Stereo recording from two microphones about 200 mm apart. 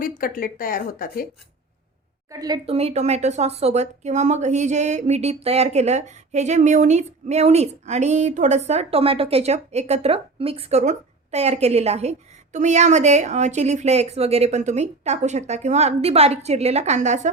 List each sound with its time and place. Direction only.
0.0 s speech: 45° left (ahead or behind)
2.3 s speech: 20° right (ahead or behind); by 17.2 s 35° right (ahead or behind)